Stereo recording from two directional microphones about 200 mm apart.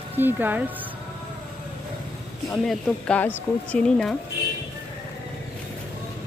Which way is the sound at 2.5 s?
5° left (ahead or behind).